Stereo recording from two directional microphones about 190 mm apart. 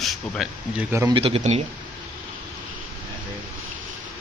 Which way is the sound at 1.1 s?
30° right (ahead or behind).